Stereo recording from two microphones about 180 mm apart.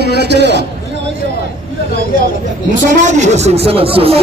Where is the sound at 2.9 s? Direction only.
45° right (ahead or behind).